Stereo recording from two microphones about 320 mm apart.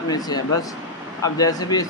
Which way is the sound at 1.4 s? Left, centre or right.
Centre.